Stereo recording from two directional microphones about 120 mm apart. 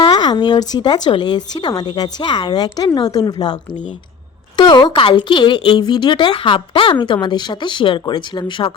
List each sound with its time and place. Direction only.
0.0 s a woman's voice: 35° left (ahead or behind)